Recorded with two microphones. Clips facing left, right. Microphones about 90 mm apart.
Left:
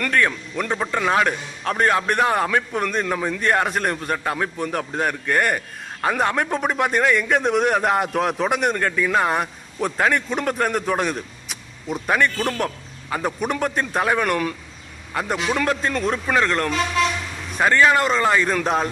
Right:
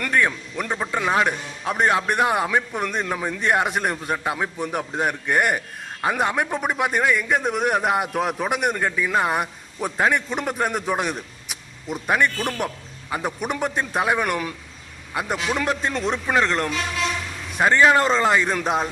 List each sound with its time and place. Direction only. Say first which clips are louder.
0.0 s a man's voice: left 1 dB; 10° right (ahead or behind)
17.9 s speech: even; 30° right (ahead or behind)
18.3 s a man's voice: left 1 dB; 15° right (ahead or behind)